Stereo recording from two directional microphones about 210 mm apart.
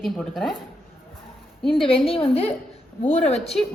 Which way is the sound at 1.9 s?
25° left (ahead or behind).